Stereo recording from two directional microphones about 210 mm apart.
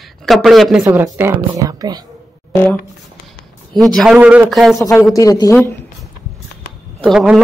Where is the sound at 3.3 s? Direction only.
Centre (ahead or behind).